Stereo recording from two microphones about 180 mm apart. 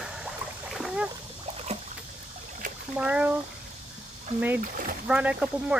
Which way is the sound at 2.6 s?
50° right (ahead or behind).